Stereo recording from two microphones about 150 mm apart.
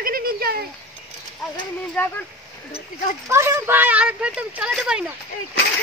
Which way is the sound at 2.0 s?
15° left (ahead or behind).